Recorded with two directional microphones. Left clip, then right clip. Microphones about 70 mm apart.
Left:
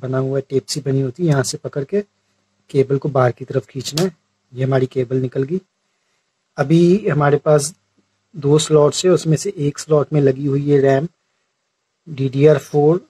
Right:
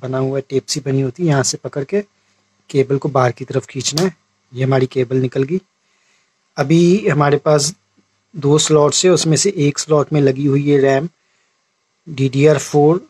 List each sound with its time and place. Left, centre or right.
0.0 s speech: right
1.1 s speech: centre
1.8 s speech: right
4.1 s speech: right